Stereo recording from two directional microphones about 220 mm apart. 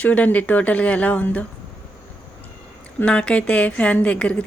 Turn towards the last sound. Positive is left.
turn(degrees=5)  # may be behind; listen again after turning